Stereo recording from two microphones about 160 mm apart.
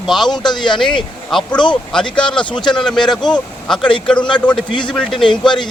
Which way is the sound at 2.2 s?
30° left (ahead or behind).